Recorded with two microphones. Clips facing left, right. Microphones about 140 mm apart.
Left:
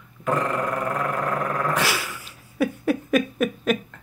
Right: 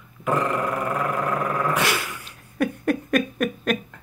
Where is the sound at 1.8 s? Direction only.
5° left (ahead or behind).